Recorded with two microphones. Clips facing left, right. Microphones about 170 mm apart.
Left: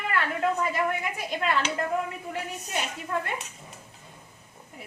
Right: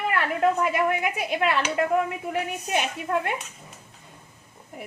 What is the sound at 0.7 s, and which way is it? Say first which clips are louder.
Speech: right 4 dB; 70° right (ahead or behind).